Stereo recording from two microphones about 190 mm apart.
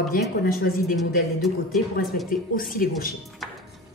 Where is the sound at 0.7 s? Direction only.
55° left (ahead or behind).